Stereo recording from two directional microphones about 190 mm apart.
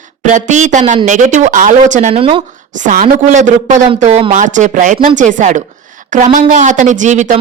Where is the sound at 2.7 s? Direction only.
40° right (ahead or behind).